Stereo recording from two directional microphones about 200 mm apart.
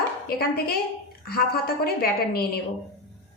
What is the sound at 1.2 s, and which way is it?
A woman's voice, 50° left (ahead or behind).